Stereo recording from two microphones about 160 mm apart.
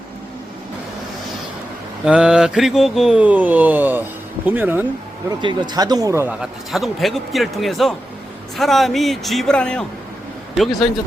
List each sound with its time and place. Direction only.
2.0 s mantra: 5° right (ahead or behind)
4.4 s speech: 10° right (ahead or behind)
5.4 s speech: 30° right (ahead or behind)
6.4 s mantra: centre (ahead or behind)